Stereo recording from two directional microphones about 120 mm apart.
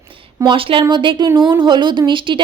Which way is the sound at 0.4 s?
45° right (ahead or behind).